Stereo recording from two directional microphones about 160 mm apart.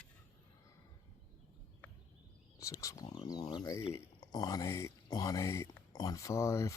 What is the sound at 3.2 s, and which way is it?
Speech, 25° left (ahead or behind).